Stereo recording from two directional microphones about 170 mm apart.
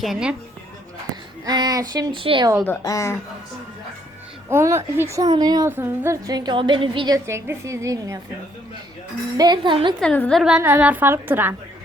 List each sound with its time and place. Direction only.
0.0 s a woman's voice: 5° right (ahead or behind)
1.1 s a woman's voice: 25° right (ahead or behind)
2.6 s a woman's voice: 20° left (ahead or behind)
4.4 s a woman's voice: 15° right (ahead or behind)
5.7 s a woman's voice: 15° right (ahead or behind); by 7.2 s 30° right (ahead or behind)
7.3 s a woman's voice: 15° right (ahead or behind)
9.4 s a woman's voice: 25° right (ahead or behind)
10.0 s a woman's voice: 5° left (ahead or behind); by 11.5 s 10° right (ahead or behind)